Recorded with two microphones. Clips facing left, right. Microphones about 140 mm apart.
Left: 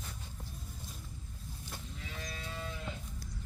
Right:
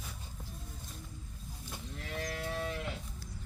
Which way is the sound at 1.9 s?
60° right (ahead or behind).